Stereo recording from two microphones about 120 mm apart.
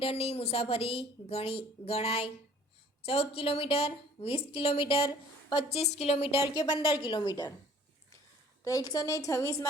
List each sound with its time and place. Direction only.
0.0 s a woman's voice: 55° left (ahead or behind)
6.5 s a woman's voice: 35° left (ahead or behind)
8.6 s a woman's voice: 30° left (ahead or behind)